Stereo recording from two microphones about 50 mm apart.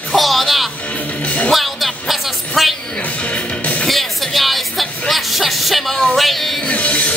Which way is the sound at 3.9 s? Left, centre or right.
Centre.